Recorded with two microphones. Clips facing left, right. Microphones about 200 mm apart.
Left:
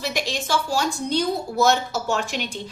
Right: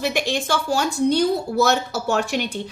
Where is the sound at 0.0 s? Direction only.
55° right (ahead or behind).